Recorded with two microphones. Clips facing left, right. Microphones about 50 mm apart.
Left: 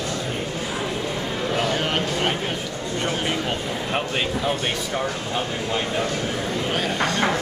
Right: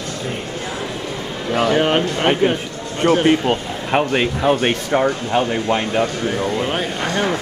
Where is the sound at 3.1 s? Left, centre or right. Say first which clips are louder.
Right 12 dB; right.